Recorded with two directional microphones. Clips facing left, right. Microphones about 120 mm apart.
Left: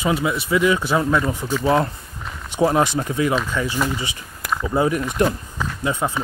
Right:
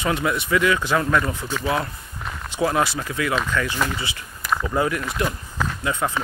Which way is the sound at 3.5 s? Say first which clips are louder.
Left 1 dB; 15° left (ahead or behind).